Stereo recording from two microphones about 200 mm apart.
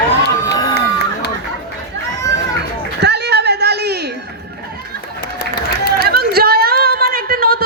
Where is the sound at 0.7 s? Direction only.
55° left (ahead or behind).